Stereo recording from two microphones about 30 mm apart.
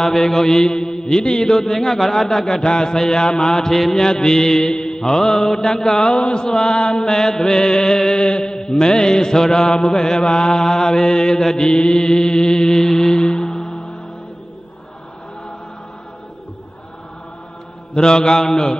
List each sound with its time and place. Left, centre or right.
0.0 s mantra: centre
0.6 s mantra: left; by 2.4 s centre
2.4 s mantra: left
7.1 s mantra: centre
9.7 s mantra: left
17.9 s mantra: left